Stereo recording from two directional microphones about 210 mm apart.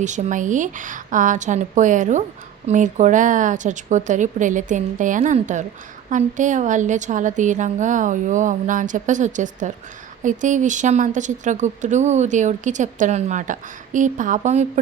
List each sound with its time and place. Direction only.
0.0 s a woman's voice: 35° right (ahead or behind)